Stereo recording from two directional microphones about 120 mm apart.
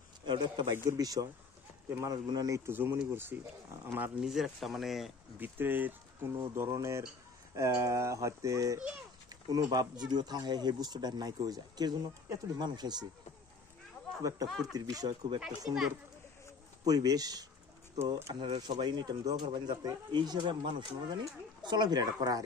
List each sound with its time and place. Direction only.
0.2 s speech: 40° right (ahead or behind)
0.7 s speech: 30° right (ahead or behind)
2.2 s speech: 30° right (ahead or behind)
4.2 s speech: centre (ahead or behind)
5.4 s speech: 15° right (ahead or behind)
8.7 s a child's voice: 10° right (ahead or behind)
9.5 s speech: 35° right (ahead or behind)
14.7 s speech: 30° right (ahead or behind)
16.8 s speech: 30° right (ahead or behind)
18.3 s speech: 40° right (ahead or behind)